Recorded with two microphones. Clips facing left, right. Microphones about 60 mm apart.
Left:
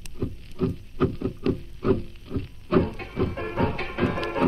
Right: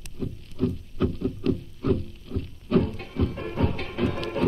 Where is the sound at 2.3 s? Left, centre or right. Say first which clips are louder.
Left 1 dB; left.